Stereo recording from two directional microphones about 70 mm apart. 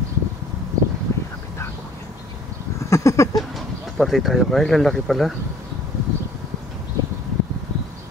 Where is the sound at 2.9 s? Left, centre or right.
Left.